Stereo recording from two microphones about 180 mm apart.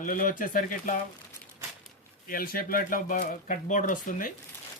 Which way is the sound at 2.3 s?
55° left (ahead or behind).